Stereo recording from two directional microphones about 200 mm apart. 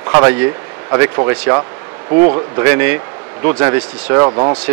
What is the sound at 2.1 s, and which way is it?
Speech, 30° right (ahead or behind).